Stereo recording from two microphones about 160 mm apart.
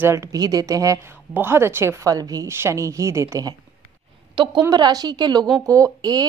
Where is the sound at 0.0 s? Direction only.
20° right (ahead or behind).